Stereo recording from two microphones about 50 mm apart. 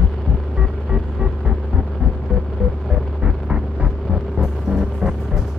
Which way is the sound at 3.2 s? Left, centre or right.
Centre.